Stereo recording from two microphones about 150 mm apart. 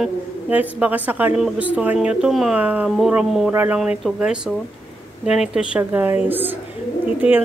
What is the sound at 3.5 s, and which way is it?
A woman's voice, 15° right (ahead or behind).